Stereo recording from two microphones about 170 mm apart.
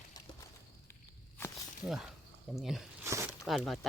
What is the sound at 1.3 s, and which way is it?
Walk, 15° left (ahead or behind).